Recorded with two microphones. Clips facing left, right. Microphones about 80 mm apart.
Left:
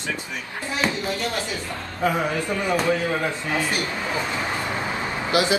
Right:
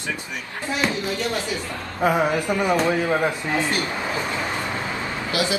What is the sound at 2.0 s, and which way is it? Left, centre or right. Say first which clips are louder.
A man's voice: right 3 dB; centre.